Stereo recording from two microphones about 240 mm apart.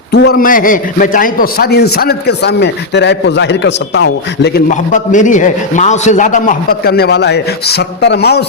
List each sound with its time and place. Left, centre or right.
0.1 s a man's voice: left
4.7 s a man's voice: left